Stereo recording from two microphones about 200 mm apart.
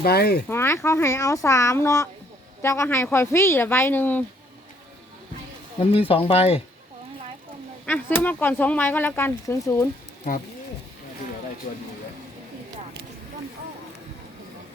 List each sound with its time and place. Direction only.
0.0 s speech: 50° left (ahead or behind)
0.4 s speech: 10° left (ahead or behind)
5.8 s speech: 30° left (ahead or behind)
7.9 s speech: 10° left (ahead or behind)
11.6 s speech: 45° left (ahead or behind)